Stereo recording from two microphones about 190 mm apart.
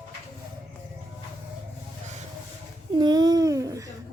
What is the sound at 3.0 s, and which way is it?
Babbling, 20° right (ahead or behind).